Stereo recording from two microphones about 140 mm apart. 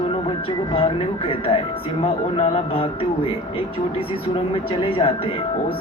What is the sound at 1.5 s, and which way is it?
Speech, 40° left (ahead or behind).